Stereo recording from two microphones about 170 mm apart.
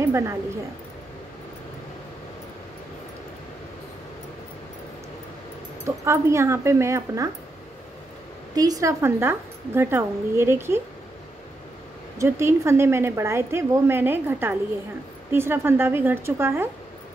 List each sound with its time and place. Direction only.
0.0 s a woman's voice: 15° right (ahead or behind)
5.9 s a woman's voice: 15° right (ahead or behind)
8.5 s a woman's voice: 20° right (ahead or behind)
12.2 s a woman's voice: 15° right (ahead or behind)